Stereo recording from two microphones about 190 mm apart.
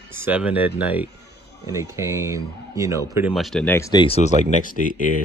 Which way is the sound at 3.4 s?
Centre (ahead or behind).